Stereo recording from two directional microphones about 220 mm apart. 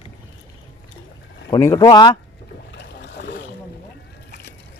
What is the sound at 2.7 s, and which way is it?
Boat, 50° left (ahead or behind).